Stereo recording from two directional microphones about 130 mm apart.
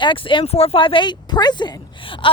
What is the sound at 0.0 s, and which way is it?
Speech, 40° left (ahead or behind).